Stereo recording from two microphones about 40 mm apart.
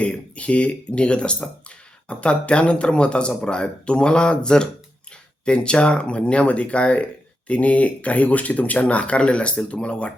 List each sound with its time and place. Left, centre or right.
0.0 s speech: left